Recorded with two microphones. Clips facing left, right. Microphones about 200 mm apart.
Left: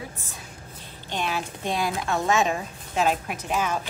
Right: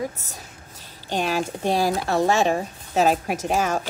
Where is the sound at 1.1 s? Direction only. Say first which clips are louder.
Right 5 dB; 40° right (ahead or behind).